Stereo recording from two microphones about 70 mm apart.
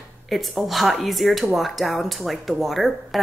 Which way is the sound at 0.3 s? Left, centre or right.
Centre.